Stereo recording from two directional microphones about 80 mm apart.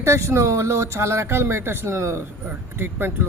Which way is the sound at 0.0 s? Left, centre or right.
Right.